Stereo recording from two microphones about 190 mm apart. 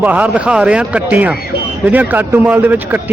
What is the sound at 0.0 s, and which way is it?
Speech, 5° right (ahead or behind).